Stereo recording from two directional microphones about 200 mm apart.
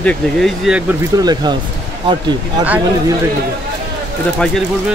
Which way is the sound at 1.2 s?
20° right (ahead or behind).